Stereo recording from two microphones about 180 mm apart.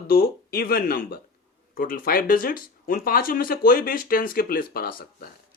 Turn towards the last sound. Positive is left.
turn(degrees=55)  # may be behind; listen again after turning